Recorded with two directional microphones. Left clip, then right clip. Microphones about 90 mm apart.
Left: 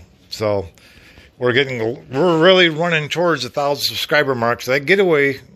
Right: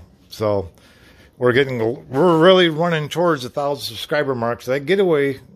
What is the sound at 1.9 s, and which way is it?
Speech, 20° right (ahead or behind).